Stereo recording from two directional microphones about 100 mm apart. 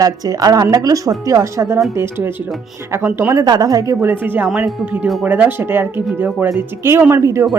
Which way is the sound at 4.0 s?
20° right (ahead or behind).